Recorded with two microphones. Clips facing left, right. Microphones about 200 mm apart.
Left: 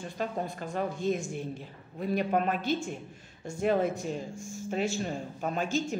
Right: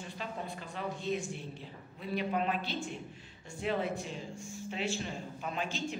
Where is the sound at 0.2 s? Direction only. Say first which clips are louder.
Left 8 dB; 45° left (ahead or behind).